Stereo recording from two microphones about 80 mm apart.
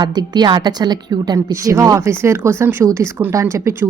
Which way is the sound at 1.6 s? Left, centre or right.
Right.